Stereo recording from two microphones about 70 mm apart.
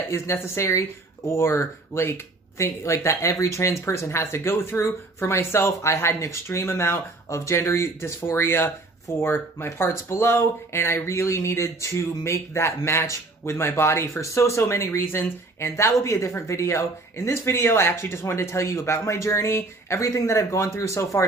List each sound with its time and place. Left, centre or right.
0.1 s speech: left